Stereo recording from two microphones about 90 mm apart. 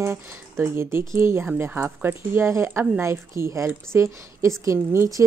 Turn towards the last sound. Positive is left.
turn(degrees=-30)  # may be behind; listen again after turning